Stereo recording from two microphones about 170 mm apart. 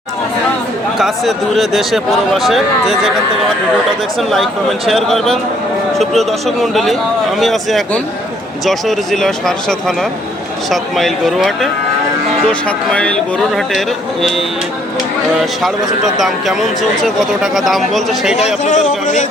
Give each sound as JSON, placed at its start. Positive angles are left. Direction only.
{"t": 0.9, "sound": "speech", "side_deg": 0}
{"t": 4.2, "sound": "speech", "side_deg": 0}
{"t": 16.1, "sound": "speech", "side_deg": 0}
{"t": 18.3, "sound": "speech", "side_deg": 40}